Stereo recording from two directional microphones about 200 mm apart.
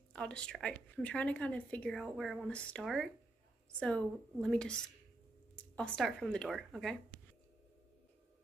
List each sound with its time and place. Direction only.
0.1 s a woman's voice: 5° left (ahead or behind)